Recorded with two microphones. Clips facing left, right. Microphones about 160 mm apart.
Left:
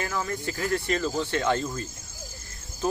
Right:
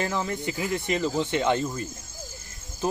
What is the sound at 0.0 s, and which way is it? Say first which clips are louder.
Speech: right 2 dB; 20° right (ahead or behind).